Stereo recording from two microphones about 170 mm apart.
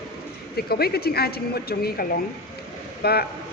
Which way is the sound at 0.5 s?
65° left (ahead or behind).